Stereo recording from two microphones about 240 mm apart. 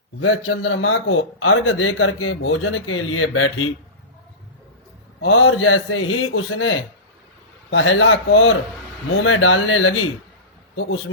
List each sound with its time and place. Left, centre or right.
0.2 s a man's voice: left
5.2 s a man's voice: left